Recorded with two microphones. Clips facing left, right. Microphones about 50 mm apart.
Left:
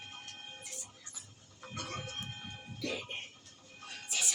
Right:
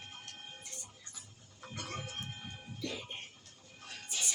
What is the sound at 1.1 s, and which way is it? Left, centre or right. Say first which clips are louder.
Music: even; centre.